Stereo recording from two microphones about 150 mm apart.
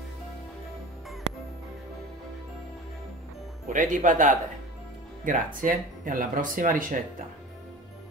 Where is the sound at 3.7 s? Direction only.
60° right (ahead or behind).